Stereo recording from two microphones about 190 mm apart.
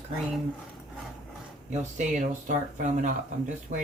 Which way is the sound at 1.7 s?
40° right (ahead or behind).